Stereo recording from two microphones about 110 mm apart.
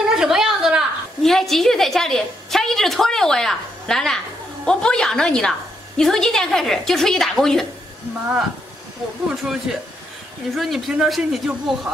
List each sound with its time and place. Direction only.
0.1 s a sound: 5° right (ahead or behind)
4.6 s a woman's voice: 5° left (ahead or behind)
9.3 s a woman's voice: centre (ahead or behind)